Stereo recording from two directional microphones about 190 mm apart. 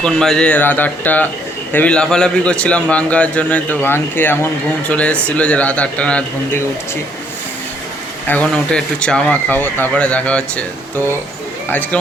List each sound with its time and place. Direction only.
0.0 s a man's voice: 5° left (ahead or behind)
8.3 s a man's voice: 5° left (ahead or behind)
11.7 s a man's voice: 10° left (ahead or behind)